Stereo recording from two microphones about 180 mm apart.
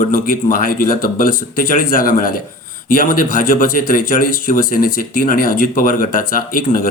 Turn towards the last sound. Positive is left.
turn(degrees=50)  # may be behind; listen again after turning